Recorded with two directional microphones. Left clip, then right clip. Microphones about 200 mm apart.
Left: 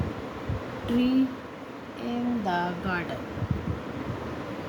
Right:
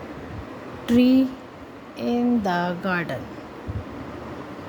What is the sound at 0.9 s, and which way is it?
Speech, 50° right (ahead or behind).